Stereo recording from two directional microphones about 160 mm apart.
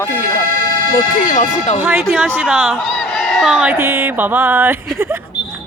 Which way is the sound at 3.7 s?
15° right (ahead or behind).